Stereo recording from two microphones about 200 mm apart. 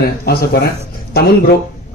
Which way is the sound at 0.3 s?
50° left (ahead or behind).